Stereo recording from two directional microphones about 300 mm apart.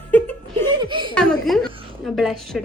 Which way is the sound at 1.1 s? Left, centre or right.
Centre.